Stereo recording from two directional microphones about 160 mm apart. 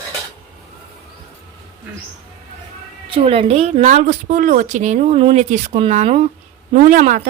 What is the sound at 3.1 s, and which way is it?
Speech, 35° right (ahead or behind).